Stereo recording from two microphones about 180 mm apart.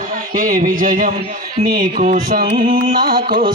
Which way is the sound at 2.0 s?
55° right (ahead or behind).